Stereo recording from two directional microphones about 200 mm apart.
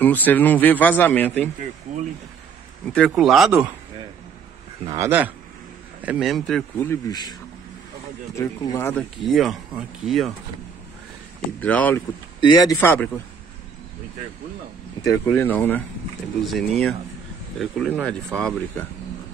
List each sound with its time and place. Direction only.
0.0 s speech: 10° left (ahead or behind)
3.1 s speech: centre (ahead or behind)
4.8 s speech: 15° right (ahead or behind); by 7.3 s 20° left (ahead or behind)
8.4 s speech: 15° left (ahead or behind)
8.9 s speech: centre (ahead or behind)
11.6 s speech: 10° left (ahead or behind)
12.4 s speech: 20° left (ahead or behind)
15.0 s speech: 10° left (ahead or behind)